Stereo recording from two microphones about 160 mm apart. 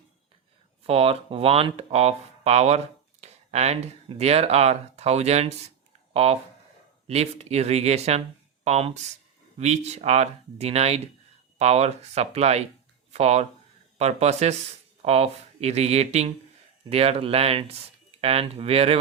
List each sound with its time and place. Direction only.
0.9 s speech: 40° right (ahead or behind)